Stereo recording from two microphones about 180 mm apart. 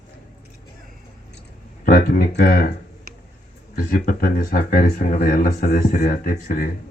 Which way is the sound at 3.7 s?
55° left (ahead or behind).